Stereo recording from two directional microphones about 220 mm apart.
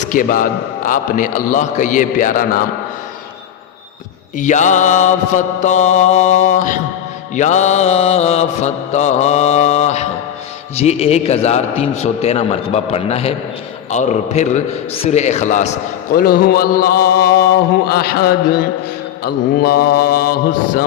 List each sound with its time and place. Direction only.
0.0 s mantra: 35° left (ahead or behind)
4.4 s mantra: 35° left (ahead or behind)
10.8 s a man's voice: 30° left (ahead or behind)
13.9 s mantra: 35° left (ahead or behind)